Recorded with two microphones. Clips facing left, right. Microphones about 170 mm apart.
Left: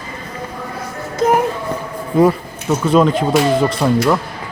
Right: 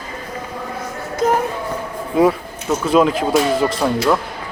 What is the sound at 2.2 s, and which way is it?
Speech, centre (ahead or behind).